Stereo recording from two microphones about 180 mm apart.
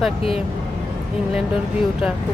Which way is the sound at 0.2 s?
30° left (ahead or behind).